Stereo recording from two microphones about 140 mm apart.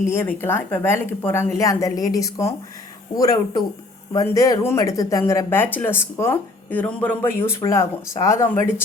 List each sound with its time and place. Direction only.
0.0 s speech: 15° left (ahead or behind)